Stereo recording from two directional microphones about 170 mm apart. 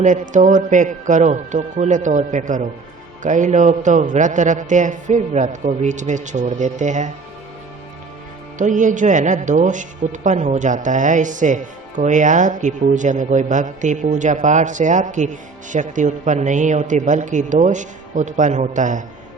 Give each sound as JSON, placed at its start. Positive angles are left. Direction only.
{"t": 0.0, "sound": "speech", "side_deg": -45}
{"t": 8.5, "sound": "speech", "side_deg": -50}